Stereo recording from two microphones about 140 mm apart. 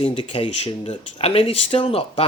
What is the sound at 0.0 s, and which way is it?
Speech, 40° left (ahead or behind).